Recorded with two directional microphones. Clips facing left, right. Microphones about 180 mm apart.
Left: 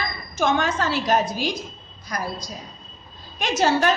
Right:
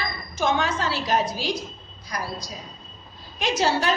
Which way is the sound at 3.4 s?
50° left (ahead or behind).